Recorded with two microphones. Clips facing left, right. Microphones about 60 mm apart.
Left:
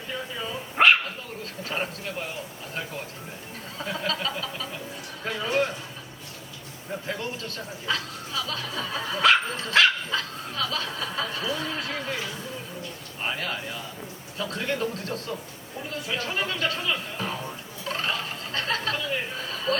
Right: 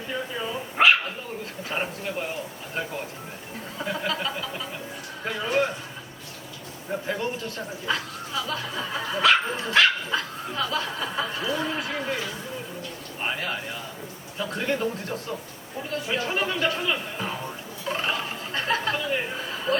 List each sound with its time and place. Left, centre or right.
0.1 s dog: centre
1.6 s a man's voice: centre
3.8 s speech: centre
5.2 s a sound: centre
7.1 s a man's voice: right
17.8 s a sound: centre